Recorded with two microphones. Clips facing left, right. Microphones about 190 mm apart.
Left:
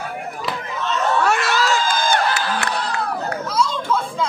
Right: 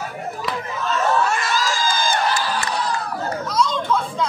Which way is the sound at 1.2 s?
70° left (ahead or behind).